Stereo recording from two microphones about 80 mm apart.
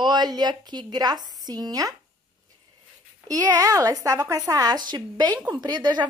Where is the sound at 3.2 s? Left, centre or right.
Right.